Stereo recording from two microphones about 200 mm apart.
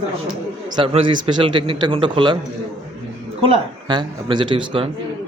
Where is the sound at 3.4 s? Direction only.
25° right (ahead or behind).